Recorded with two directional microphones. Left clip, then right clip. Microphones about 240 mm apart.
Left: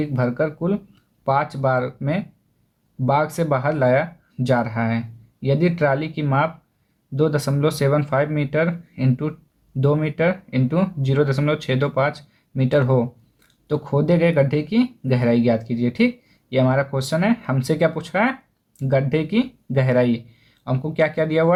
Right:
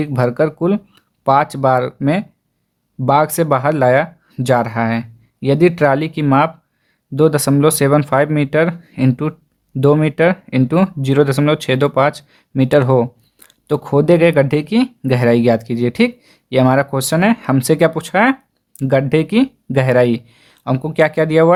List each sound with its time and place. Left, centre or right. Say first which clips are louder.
0.0 s speech: right 6 dB; right